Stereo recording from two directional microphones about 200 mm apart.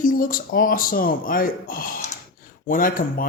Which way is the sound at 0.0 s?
45° left (ahead or behind).